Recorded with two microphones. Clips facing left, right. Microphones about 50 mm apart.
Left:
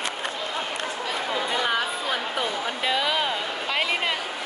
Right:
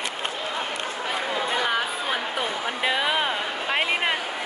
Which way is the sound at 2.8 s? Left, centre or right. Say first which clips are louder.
Right 1 dB; right.